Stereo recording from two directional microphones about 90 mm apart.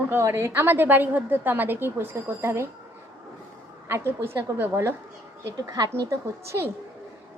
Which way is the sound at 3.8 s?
30° right (ahead or behind).